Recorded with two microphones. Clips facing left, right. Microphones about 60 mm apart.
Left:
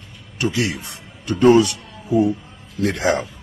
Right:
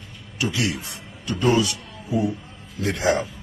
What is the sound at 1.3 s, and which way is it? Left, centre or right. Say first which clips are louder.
Speech: left 7 dB; left.